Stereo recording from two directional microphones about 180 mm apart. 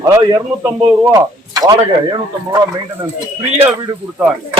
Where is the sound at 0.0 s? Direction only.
20° right (ahead or behind).